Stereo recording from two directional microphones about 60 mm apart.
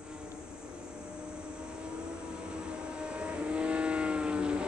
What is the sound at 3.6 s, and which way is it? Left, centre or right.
Vehicle, centre.